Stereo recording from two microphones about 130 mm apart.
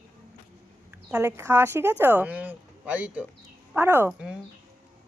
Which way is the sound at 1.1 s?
20° right (ahead or behind).